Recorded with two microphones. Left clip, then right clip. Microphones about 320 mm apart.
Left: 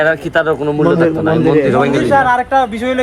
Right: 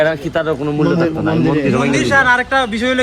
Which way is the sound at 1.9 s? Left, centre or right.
Centre.